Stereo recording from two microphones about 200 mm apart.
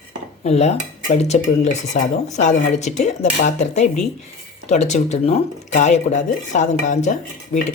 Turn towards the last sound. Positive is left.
turn(degrees=35)  # may be behind; listen again after turning